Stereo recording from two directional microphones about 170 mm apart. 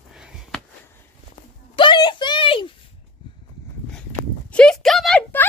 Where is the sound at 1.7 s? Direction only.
25° left (ahead or behind).